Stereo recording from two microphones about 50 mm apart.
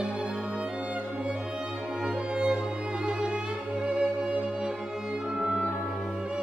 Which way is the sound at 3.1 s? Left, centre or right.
Centre.